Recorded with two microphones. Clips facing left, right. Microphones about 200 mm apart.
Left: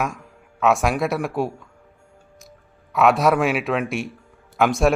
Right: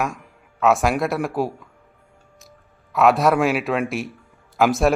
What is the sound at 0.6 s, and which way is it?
Speech, centre (ahead or behind).